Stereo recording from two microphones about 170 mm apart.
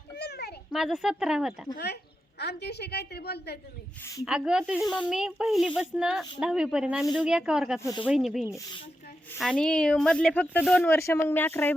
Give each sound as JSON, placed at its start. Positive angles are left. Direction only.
{"t": 0.2, "sound": "a sound", "side_deg": 75}
{"t": 0.7, "sound": "speech", "side_deg": 0}
{"t": 2.4, "sound": "a woman's voice", "side_deg": 75}
{"t": 4.0, "sound": "speech", "side_deg": 20}
{"t": 4.3, "sound": "speech", "side_deg": -5}
{"t": 8.4, "sound": "speech", "side_deg": 20}
{"t": 9.4, "sound": "a woman's voice", "side_deg": 5}